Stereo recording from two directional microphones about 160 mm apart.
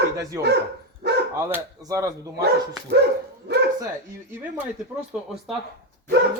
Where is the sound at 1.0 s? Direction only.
90° right.